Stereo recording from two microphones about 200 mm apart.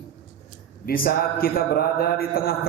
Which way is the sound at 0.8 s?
45° left (ahead or behind).